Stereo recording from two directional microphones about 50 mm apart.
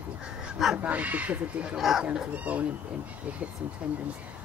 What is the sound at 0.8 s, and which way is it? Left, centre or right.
Speech, right.